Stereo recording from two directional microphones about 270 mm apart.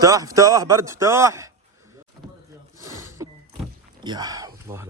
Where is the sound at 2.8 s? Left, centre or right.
Centre.